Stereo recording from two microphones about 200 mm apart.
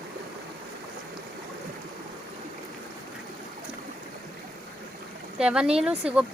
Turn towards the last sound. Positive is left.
turn(degrees=-5)  # may be behind; listen again after turning